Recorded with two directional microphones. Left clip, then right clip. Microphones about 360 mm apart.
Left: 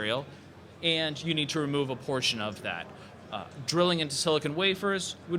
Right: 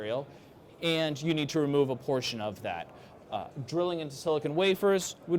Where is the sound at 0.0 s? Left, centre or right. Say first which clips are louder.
Left 2 dB; right.